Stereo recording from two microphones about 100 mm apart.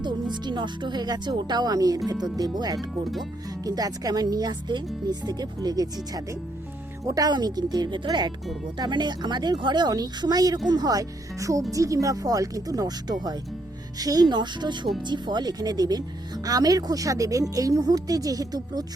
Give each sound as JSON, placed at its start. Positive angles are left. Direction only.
{"t": 0.0, "sound": "speech", "side_deg": -50}
{"t": 7.0, "sound": "speech", "side_deg": -40}